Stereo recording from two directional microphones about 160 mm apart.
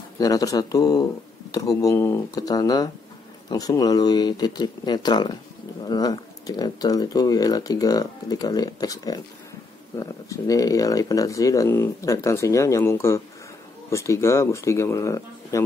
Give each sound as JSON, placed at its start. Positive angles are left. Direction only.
{"t": 0.2, "sound": "speech", "side_deg": 20}